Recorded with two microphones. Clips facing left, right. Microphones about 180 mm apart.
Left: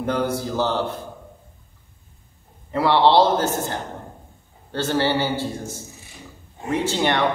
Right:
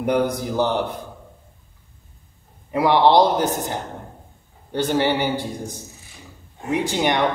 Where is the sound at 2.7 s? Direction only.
15° right (ahead or behind).